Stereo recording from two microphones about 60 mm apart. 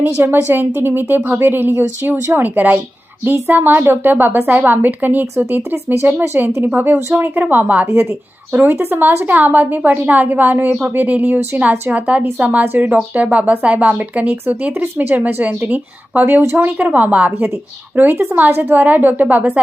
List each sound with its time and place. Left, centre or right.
0.2 s a woman's voice: right
6.7 s a woman's voice: right
12.6 s a woman's voice: right